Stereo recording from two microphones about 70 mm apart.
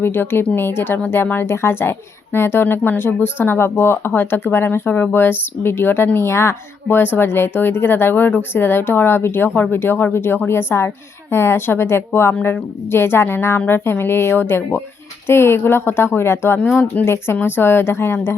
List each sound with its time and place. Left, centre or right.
0.0 s speech: left
16.9 s speech: left